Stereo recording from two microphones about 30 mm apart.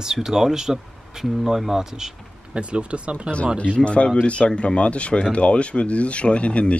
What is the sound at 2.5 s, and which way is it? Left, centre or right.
Speech, right.